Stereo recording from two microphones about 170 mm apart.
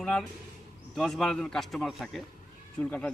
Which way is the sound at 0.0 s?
5° left (ahead or behind).